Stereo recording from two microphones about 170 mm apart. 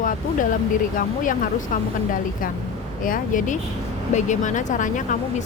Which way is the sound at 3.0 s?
50° left (ahead or behind).